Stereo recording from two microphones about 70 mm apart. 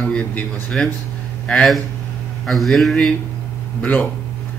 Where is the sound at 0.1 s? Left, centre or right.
Centre.